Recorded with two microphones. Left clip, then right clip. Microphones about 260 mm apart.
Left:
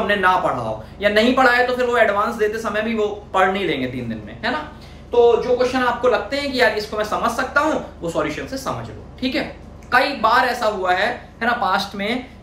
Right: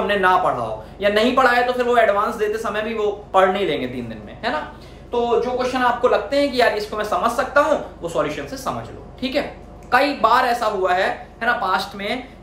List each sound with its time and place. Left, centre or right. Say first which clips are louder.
0.0 s a man's voice: even; centre
5.7 s a man's voice: even; centre